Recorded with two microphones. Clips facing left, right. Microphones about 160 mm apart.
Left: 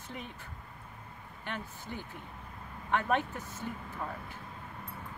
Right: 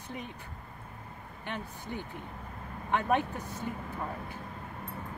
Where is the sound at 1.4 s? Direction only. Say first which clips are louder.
Right 2 dB; 15° right (ahead or behind).